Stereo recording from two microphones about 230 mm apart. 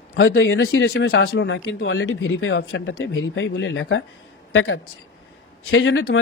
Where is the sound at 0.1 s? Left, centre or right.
Left.